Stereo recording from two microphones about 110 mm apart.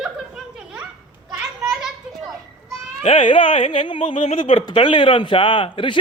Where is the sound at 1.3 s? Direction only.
5° right (ahead or behind).